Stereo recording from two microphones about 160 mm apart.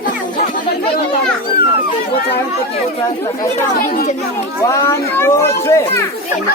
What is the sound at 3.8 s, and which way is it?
Speech, 65° left (ahead or behind).